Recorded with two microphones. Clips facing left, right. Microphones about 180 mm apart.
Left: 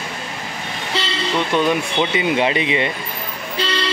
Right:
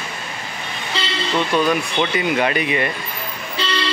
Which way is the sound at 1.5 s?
20° left (ahead or behind).